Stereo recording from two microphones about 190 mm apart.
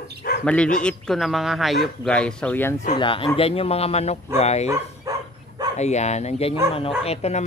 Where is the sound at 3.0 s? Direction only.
25° left (ahead or behind).